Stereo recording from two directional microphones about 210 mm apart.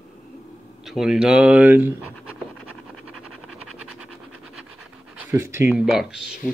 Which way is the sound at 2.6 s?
90° right.